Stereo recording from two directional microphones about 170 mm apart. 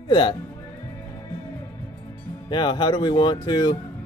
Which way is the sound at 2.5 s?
25° left (ahead or behind).